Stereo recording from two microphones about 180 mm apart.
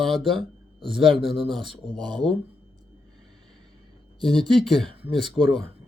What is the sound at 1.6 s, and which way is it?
Speech, 25° right (ahead or behind).